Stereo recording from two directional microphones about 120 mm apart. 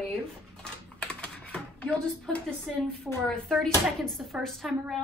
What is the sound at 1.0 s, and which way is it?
A woman's voice, 10° left (ahead or behind).